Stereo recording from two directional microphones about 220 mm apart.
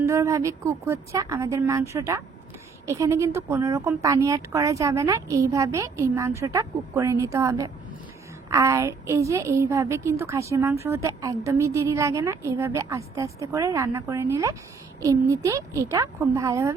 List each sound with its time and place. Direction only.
0.0 s a woman's voice: 15° right (ahead or behind)